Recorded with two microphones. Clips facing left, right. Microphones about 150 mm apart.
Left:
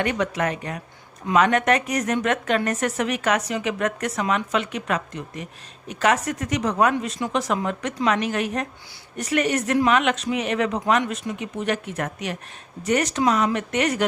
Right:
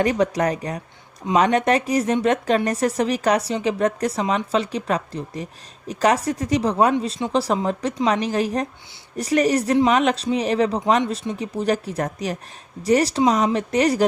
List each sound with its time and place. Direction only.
0.0 s a woman's voice: 35° right (ahead or behind)